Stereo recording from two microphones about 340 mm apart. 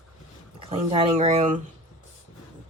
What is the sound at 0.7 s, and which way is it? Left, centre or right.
Speech, centre.